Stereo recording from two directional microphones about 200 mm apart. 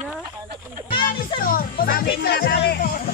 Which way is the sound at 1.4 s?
45° left (ahead or behind).